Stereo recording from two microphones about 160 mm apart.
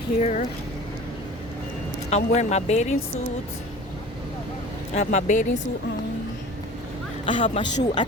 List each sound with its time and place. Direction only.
0.2 s speech: 45° left (ahead or behind)
2.0 s speech: 45° left (ahead or behind)
4.9 s speech: 50° left (ahead or behind)
7.3 s speech: 35° left (ahead or behind)